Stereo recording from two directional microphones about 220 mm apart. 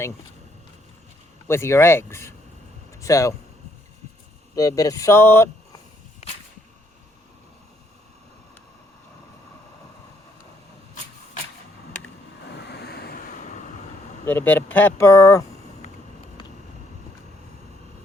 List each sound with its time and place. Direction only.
1.5 s speech: 10° left (ahead or behind)
4.5 s speech: 15° left (ahead or behind)
12.5 s vehicle: 50° left (ahead or behind)
14.3 s speech: 10° left (ahead or behind)